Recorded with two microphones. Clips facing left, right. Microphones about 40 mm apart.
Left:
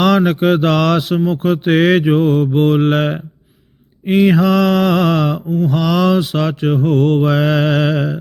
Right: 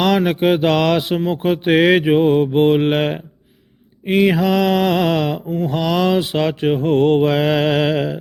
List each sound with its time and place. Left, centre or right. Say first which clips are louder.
0.3 s mantra: left 1 dB; centre
5.5 s mantra: left 4 dB; right
5.7 s mantra: left 2 dB; centre
6.7 s mantra: even; right
7.3 s mantra: left 1 dB; centre